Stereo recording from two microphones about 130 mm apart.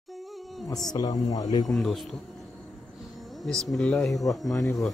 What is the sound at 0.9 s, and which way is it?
Speech, 30° left (ahead or behind).